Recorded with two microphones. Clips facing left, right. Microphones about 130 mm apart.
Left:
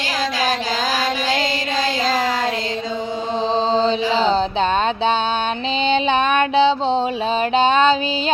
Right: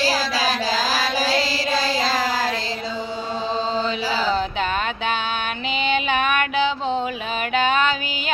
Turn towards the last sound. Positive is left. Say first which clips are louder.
# left 5 dB
turn(degrees=25)  # may be behind; listen again after turning